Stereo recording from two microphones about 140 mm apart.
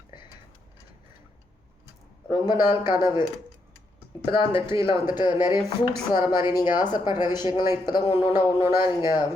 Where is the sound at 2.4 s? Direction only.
30° left (ahead or behind).